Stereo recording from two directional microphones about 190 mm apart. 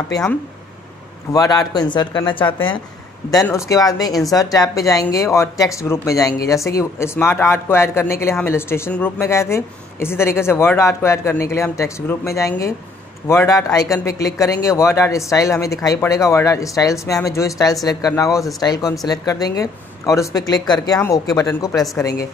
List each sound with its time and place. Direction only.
1.3 s speech: 20° left (ahead or behind)